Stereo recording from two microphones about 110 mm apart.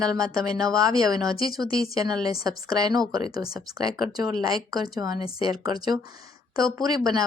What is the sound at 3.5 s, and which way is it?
Speech, 35° right (ahead or behind).